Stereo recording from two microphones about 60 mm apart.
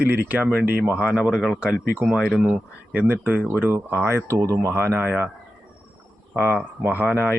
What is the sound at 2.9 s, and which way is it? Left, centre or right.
Speech, right.